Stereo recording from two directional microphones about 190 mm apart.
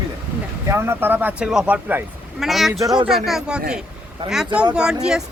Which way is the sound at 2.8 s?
20° right (ahead or behind).